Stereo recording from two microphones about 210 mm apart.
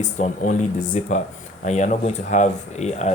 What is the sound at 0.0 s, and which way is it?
Speech, 35° left (ahead or behind).